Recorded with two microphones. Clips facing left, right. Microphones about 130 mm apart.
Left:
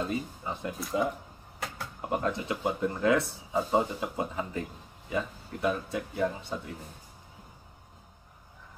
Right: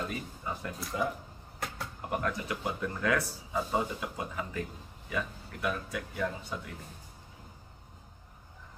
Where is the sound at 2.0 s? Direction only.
25° left (ahead or behind).